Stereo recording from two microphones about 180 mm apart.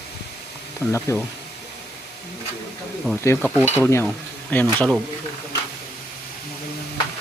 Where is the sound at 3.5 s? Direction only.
10° right (ahead or behind).